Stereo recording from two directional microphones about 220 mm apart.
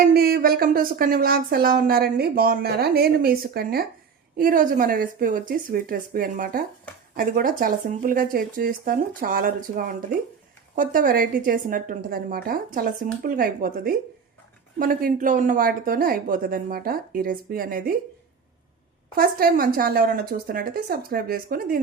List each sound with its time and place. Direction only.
0.0 s a woman's voice: 45° right (ahead or behind)
19.1 s a woman's voice: 40° right (ahead or behind)